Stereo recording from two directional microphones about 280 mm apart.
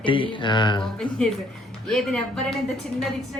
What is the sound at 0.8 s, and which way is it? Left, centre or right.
Speech, centre.